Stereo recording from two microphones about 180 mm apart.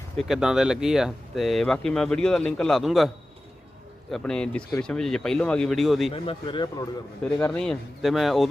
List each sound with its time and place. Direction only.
0.2 s speech: centre (ahead or behind)
4.1 s speech: 5° left (ahead or behind)
6.1 s speech: 30° left (ahead or behind)
7.3 s speech: 5° left (ahead or behind)